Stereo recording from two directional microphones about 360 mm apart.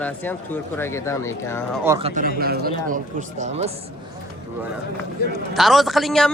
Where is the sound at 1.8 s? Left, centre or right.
Centre.